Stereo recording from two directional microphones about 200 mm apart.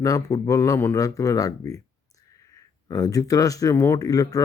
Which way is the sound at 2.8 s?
20° left (ahead or behind).